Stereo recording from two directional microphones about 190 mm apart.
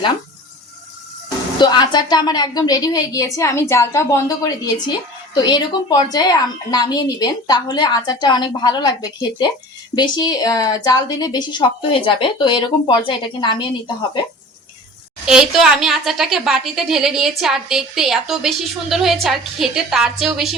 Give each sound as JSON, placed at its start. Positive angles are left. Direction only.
{"t": 1.5, "sound": "a woman's voice", "side_deg": 25}
{"t": 15.3, "sound": "a woman's voice", "side_deg": -5}